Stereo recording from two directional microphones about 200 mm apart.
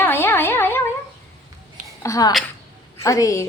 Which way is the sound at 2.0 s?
15° left (ahead or behind).